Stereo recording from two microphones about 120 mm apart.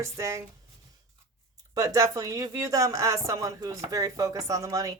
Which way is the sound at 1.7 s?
30° right (ahead or behind).